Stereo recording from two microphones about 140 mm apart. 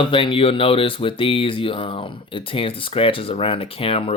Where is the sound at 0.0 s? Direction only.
35° left (ahead or behind).